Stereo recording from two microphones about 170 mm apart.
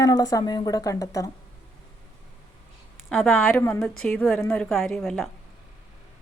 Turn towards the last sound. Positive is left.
turn(degrees=0)  # may be behind; listen again after turning